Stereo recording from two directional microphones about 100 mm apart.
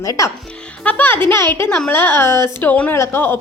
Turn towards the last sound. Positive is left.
turn(degrees=20)  # may be behind; listen again after turning